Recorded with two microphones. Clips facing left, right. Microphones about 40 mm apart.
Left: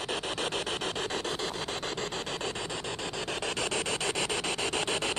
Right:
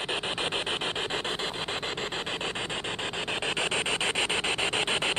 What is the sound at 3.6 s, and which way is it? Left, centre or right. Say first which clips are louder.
Rub: right 4 dB; right.